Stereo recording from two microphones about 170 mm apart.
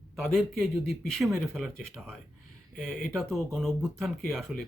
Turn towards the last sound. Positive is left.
turn(degrees=0)  # may be behind; listen again after turning